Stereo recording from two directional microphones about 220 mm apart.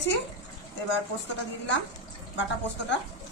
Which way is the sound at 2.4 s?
55° left (ahead or behind).